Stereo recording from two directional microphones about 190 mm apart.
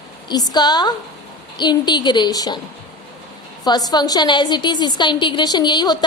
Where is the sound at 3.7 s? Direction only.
20° left (ahead or behind).